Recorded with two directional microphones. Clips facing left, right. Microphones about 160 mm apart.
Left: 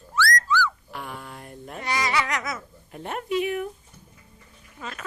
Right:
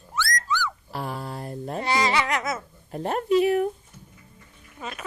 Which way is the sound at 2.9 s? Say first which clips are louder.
Right 6 dB; 35° right (ahead or behind).